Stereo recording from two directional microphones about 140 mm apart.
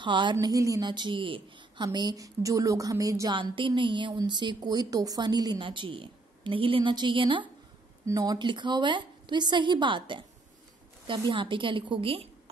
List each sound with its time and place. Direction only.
0.0 s a woman's voice: 35° right (ahead or behind)
8.0 s a woman's voice: 25° right (ahead or behind); by 12.3 s 40° right (ahead or behind)